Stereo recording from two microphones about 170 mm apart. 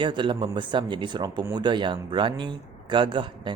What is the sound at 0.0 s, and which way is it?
A man's voice, 30° right (ahead or behind).